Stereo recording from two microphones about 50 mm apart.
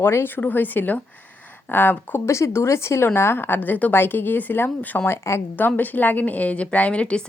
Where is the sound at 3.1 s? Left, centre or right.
Left.